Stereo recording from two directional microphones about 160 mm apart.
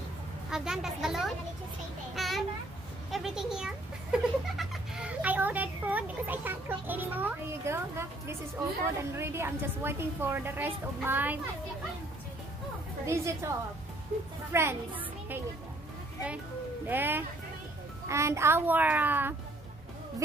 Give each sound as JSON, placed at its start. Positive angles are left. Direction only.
{"t": 0.5, "sound": "a woman's voice", "side_deg": -5}
{"t": 2.1, "sound": "a sound", "side_deg": 0}
{"t": 3.1, "sound": "a woman's voice", "side_deg": 0}
{"t": 13.0, "sound": "a woman's voice", "side_deg": -15}
{"t": 16.8, "sound": "a woman's voice", "side_deg": -10}